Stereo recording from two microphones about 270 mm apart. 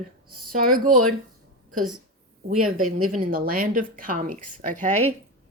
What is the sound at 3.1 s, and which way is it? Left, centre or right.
A woman's voice, right.